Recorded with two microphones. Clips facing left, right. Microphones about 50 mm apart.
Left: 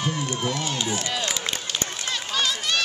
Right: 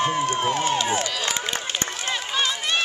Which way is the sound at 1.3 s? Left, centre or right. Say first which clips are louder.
Right 2 dB; right.